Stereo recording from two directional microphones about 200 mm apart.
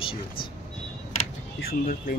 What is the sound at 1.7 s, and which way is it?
Speech, 50° left (ahead or behind).